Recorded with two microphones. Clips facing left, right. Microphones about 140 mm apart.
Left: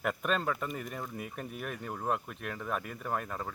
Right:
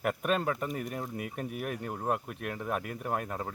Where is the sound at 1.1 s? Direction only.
65° right (ahead or behind).